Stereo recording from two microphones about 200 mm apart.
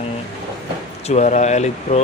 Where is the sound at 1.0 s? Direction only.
35° left (ahead or behind).